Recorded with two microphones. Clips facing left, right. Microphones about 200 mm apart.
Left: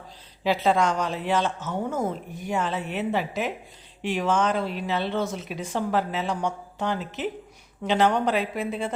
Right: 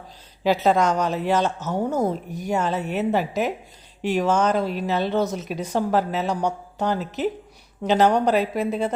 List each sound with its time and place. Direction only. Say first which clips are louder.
0.4 s speech: right 3 dB; 45° right (ahead or behind)